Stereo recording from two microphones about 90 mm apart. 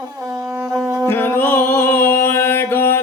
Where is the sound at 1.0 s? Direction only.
25° left (ahead or behind).